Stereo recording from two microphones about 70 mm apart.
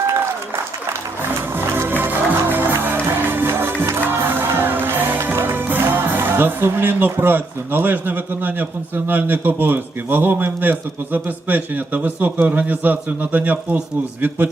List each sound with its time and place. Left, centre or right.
0.1 s applause: right
1.5 s music: right
9.0 s a man's voice: right